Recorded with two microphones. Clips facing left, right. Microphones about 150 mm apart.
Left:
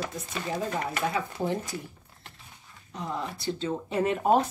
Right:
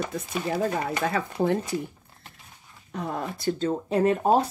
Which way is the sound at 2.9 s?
60° right (ahead or behind).